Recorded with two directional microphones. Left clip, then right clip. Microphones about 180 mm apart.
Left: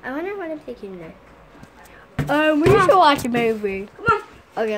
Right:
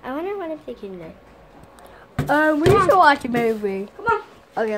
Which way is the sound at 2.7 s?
20° left (ahead or behind).